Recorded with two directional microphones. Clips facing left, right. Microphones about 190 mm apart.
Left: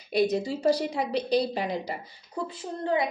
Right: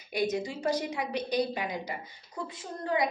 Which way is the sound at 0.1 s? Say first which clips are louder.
Left 5 dB; 35° left (ahead or behind).